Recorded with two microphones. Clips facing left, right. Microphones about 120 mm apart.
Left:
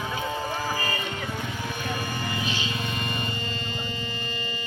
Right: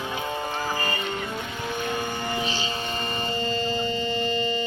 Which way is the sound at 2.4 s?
30° right (ahead or behind).